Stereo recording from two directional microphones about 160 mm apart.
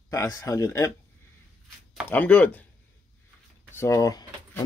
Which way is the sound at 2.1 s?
10° left (ahead or behind).